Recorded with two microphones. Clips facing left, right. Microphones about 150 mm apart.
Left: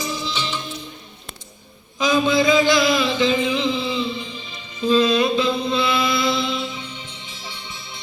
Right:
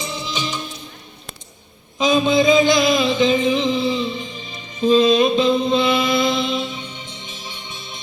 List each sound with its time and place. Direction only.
0.0 s music: 25° right (ahead or behind)
2.0 s music: 20° right (ahead or behind)